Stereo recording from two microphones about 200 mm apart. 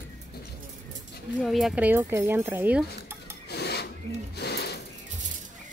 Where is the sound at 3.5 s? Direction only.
55° left (ahead or behind).